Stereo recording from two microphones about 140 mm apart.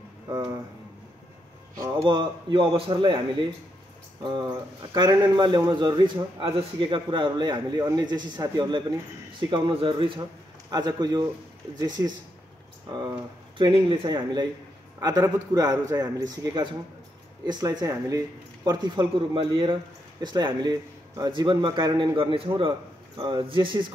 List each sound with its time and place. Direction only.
1.8 s a man's voice: 30° right (ahead or behind)
4.9 s a man's voice: 30° right (ahead or behind)
13.6 s a man's voice: 35° right (ahead or behind)